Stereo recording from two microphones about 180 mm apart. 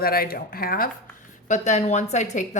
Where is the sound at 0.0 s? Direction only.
55° left (ahead or behind).